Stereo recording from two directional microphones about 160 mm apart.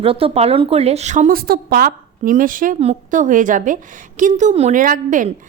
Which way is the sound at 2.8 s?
45° right (ahead or behind).